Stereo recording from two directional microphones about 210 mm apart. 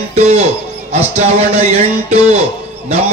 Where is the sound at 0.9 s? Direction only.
30° right (ahead or behind).